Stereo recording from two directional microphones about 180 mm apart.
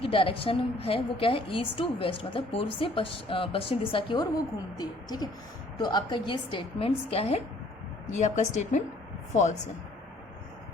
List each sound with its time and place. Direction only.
0.0 s a woman's voice: 30° left (ahead or behind)